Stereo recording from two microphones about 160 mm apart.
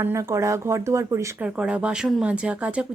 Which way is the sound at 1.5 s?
5° right (ahead or behind).